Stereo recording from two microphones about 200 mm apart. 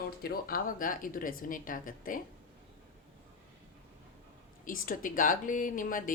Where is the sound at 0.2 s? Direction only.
50° left (ahead or behind).